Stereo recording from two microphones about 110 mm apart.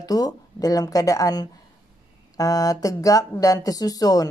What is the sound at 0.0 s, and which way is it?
Speech, 35° left (ahead or behind).